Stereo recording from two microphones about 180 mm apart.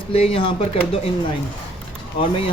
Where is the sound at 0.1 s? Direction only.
30° left (ahead or behind).